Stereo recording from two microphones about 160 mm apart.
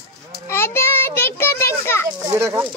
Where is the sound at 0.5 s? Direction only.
15° left (ahead or behind).